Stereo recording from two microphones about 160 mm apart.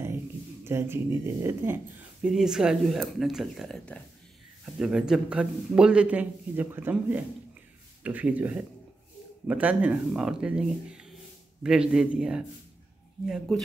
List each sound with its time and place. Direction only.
0.7 s speech: 15° right (ahead or behind)
2.2 s speech: 5° right (ahead or behind)